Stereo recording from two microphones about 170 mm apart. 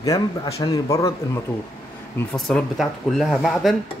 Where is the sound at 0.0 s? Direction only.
20° left (ahead or behind).